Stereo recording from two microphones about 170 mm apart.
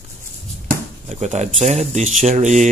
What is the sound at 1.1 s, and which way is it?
Speech, 45° right (ahead or behind).